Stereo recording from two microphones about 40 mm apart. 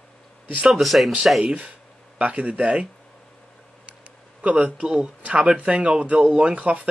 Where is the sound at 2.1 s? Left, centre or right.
Right.